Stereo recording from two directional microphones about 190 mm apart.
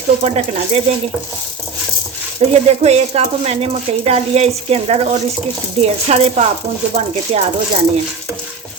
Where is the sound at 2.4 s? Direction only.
35° right (ahead or behind).